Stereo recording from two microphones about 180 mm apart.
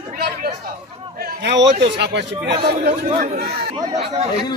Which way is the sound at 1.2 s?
75° right (ahead or behind).